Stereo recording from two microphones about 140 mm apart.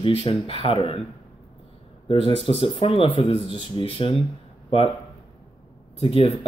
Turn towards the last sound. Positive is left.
turn(degrees=45)  # may be behind; listen again after turning